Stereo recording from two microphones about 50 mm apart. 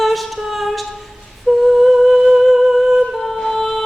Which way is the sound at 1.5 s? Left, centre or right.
Centre.